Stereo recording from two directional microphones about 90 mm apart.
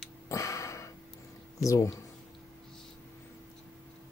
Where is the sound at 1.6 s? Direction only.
40° left (ahead or behind).